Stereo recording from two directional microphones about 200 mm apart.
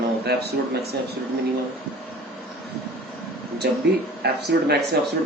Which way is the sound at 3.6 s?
50° right (ahead or behind).